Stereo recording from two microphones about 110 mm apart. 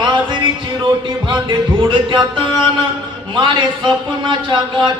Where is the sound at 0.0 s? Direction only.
45° right (ahead or behind).